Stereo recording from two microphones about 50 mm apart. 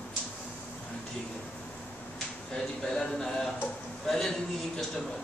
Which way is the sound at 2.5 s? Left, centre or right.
Centre.